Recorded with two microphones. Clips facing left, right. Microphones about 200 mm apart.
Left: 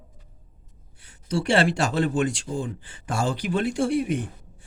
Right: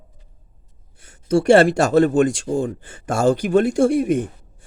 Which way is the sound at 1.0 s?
45° right (ahead or behind).